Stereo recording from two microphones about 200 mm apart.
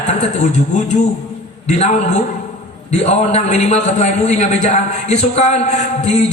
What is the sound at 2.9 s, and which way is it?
A man's voice, 35° left (ahead or behind).